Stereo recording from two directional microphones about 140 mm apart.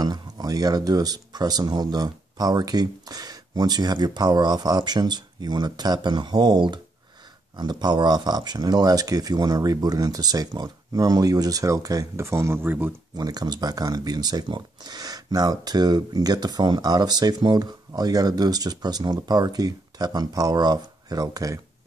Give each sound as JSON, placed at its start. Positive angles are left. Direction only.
{"t": 0.0, "sound": "speech", "side_deg": -30}
{"t": 13.1, "sound": "speech", "side_deg": -30}